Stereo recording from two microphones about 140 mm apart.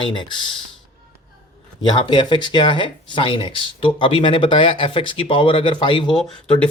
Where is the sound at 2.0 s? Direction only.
35° left (ahead or behind).